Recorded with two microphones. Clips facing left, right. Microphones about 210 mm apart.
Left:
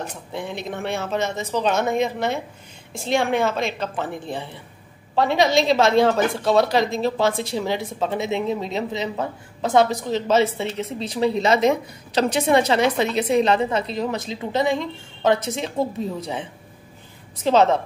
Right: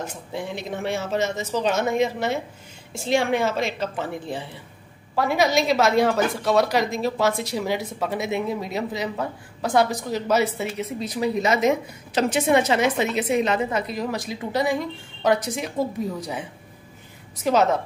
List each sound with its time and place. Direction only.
0.0 s speech: 60° left (ahead or behind)
5.1 s a woman's voice: 25° left (ahead or behind)